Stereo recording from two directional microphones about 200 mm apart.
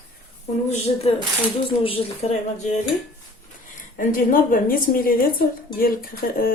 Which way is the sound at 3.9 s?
45° left (ahead or behind).